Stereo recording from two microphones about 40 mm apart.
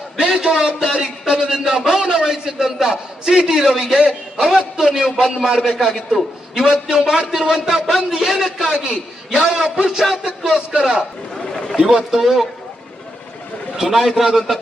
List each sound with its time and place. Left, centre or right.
0.2 s a man's voice: right
5.7 s a man's voice: centre
6.1 s a man's voice: centre
11.3 s chatter: centre
11.8 s a man's voice: centre
13.7 s a man's voice: centre